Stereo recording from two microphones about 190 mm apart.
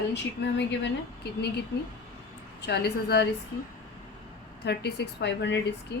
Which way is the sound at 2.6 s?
60° left (ahead or behind).